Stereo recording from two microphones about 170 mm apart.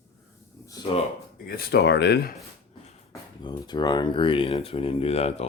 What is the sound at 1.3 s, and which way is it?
Speech, 60° left (ahead or behind).